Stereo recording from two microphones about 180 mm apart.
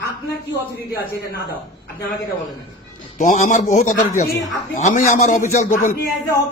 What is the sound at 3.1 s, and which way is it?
Speech, 40° left (ahead or behind).